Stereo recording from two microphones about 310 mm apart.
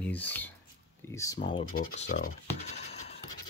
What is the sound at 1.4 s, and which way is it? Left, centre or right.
Speech, left.